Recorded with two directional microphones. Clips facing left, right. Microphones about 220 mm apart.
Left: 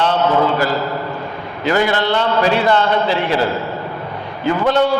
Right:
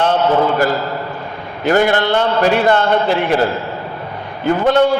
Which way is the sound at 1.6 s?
50° right (ahead or behind).